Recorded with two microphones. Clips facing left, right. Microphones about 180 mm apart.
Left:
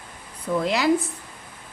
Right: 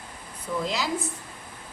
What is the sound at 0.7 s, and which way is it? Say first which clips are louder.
Speech: left 10 dB; 65° left (ahead or behind).